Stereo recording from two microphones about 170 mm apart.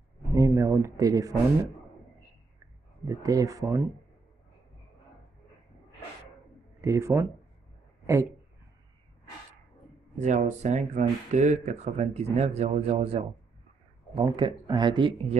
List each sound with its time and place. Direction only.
0.3 s speech: 20° right (ahead or behind)
3.1 s speech: 20° right (ahead or behind)
6.8 s speech: 15° right (ahead or behind)
10.1 s speech: 45° right (ahead or behind); by 15.3 s 25° right (ahead or behind)